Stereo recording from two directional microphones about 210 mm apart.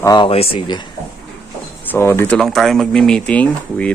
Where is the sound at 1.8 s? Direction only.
10° left (ahead or behind).